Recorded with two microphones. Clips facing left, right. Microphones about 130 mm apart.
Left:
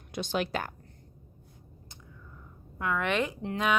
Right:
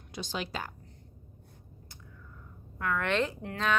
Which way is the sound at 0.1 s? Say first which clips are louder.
Left 6 dB; 60° left (ahead or behind).